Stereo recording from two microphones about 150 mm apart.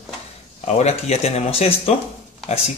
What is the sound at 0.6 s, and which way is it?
Speech, 50° left (ahead or behind).